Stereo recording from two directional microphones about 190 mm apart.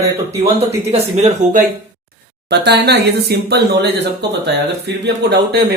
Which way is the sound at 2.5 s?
60° right (ahead or behind).